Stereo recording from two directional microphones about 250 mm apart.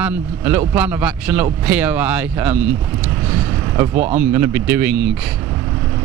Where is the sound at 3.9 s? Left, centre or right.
Right.